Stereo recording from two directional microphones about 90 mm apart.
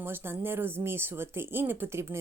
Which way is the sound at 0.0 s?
25° right (ahead or behind).